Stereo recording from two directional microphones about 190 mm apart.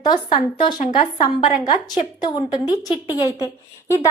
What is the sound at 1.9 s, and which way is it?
A woman's voice, 25° left (ahead or behind).